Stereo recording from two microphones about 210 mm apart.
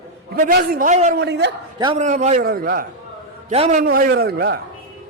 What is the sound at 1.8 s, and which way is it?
Speech, 20° right (ahead or behind).